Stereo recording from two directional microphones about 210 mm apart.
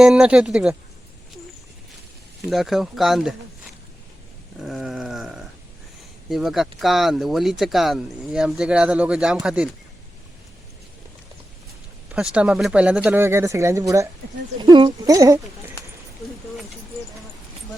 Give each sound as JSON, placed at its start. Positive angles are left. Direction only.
{"t": 0.0, "sound": "speech", "side_deg": -5}
{"t": 2.5, "sound": "speech", "side_deg": 0}
{"t": 4.6, "sound": "speech", "side_deg": 0}
{"t": 12.1, "sound": "speech", "side_deg": -5}